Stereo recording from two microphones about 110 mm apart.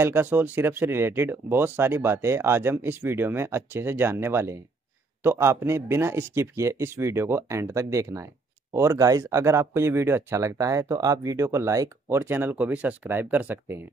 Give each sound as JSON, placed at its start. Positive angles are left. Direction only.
{"t": 0.0, "sound": "speech", "side_deg": -20}